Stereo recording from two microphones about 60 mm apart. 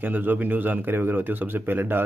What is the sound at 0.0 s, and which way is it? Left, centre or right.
Speech, right.